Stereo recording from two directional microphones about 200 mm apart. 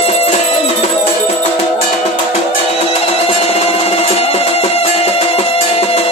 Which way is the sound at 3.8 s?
30° left (ahead or behind).